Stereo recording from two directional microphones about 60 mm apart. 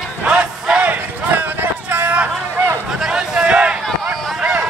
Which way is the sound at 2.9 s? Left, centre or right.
Centre.